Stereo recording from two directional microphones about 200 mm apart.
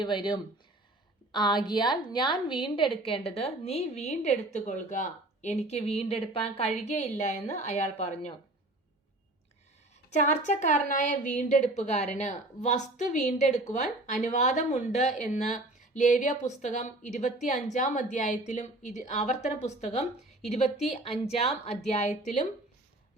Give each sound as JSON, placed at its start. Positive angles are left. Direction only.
{"t": 0.0, "sound": "a woman's voice", "side_deg": 25}
{"t": 10.1, "sound": "a woman's voice", "side_deg": 35}
{"t": 21.2, "sound": "a woman's voice", "side_deg": 30}